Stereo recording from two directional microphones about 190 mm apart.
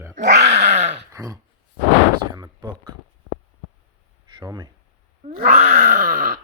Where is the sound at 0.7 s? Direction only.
35° right (ahead or behind).